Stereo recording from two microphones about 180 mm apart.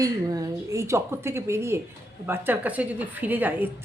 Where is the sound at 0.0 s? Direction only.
20° right (ahead or behind).